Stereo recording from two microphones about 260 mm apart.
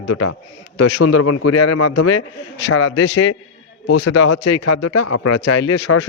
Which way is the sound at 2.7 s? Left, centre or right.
Left.